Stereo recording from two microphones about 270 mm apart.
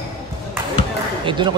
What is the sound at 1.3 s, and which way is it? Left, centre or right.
Speech, centre.